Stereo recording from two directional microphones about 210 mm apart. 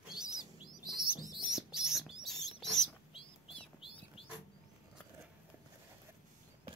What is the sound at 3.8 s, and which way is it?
Bird, 25° left (ahead or behind).